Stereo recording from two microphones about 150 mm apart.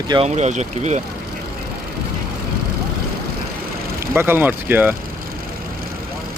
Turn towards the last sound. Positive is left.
turn(degrees=-10)  # may be behind; listen again after turning